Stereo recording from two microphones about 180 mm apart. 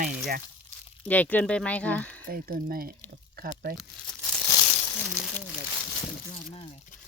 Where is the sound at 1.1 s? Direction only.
10° left (ahead or behind).